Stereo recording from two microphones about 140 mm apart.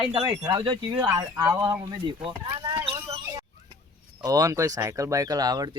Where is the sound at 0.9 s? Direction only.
20° right (ahead or behind).